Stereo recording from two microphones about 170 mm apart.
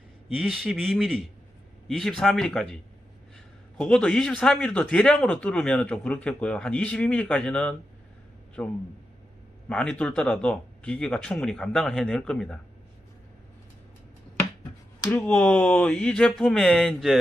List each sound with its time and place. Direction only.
0.3 s speech: centre (ahead or behind)
3.8 s speech: 5° left (ahead or behind)
15.1 s speech: 5° left (ahead or behind)